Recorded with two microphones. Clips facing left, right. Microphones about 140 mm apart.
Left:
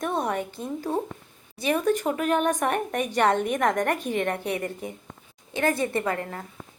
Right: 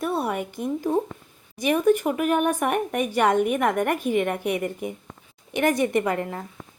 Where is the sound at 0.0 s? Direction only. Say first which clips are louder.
Right 1 dB; 5° right (ahead or behind).